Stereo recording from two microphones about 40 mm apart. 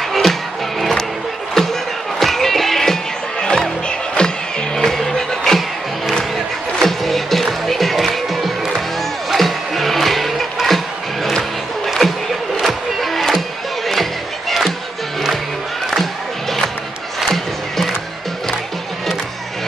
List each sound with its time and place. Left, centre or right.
0.1 s music: centre
4.2 s music: left
4.7 s music: centre
6.8 s music: centre
12.0 s a sound: centre
12.6 s music: centre
17.3 s music: centre